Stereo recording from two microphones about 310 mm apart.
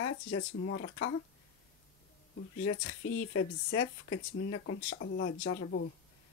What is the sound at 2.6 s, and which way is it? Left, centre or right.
Speech, left.